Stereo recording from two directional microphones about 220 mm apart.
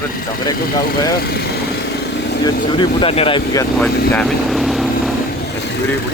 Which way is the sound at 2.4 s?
20° left (ahead or behind).